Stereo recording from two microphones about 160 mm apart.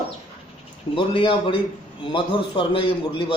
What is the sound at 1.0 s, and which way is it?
Speech, 30° left (ahead or behind).